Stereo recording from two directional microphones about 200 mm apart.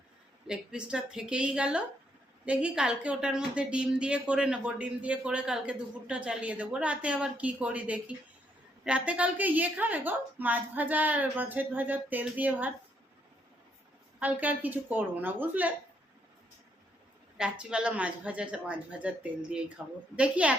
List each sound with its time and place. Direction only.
0.4 s a woman's voice: 5° right (ahead or behind)
14.2 s a woman's voice: 10° right (ahead or behind)
17.3 s a woman's voice: 5° right (ahead or behind)